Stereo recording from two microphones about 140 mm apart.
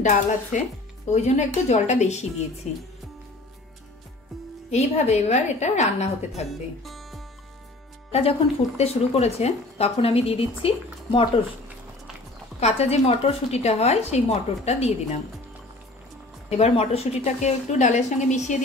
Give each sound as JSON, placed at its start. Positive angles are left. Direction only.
{"t": 0.5, "sound": "a woman's voice", "side_deg": 60}
{"t": 4.6, "sound": "speech", "side_deg": 50}
{"t": 6.5, "sound": "speech", "side_deg": 0}
{"t": 8.1, "sound": "speech", "side_deg": 45}
{"t": 12.5, "sound": "speech", "side_deg": 50}
{"t": 16.4, "sound": "speech", "side_deg": 50}